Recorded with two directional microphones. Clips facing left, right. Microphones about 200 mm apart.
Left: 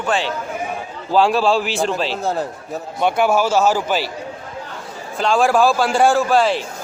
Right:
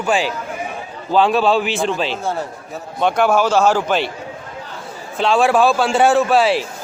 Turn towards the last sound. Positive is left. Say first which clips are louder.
# right 1 dB
turn(degrees=-5)  # may be behind; listen again after turning